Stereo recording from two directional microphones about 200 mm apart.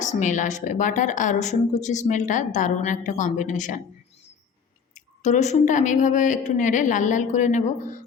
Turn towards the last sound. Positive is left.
turn(degrees=40)  # may be behind; listen again after turning